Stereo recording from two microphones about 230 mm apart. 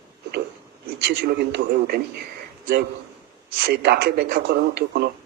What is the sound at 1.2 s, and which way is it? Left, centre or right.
Speech, right.